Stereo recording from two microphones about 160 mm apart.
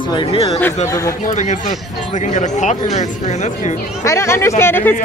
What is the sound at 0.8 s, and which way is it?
Speech, 20° left (ahead or behind).